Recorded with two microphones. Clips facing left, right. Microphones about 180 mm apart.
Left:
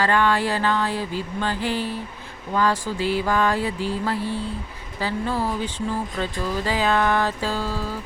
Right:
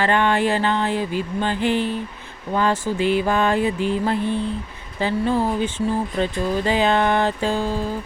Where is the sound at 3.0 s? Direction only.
20° right (ahead or behind).